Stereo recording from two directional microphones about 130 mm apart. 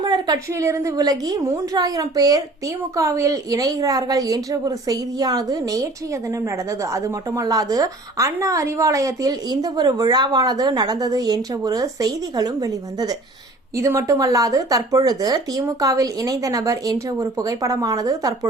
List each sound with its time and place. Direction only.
0.0 s a woman's voice: 30° right (ahead or behind)
6.9 s a woman's voice: 25° right (ahead or behind)